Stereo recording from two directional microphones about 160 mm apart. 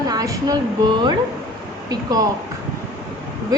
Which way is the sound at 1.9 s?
25° right (ahead or behind).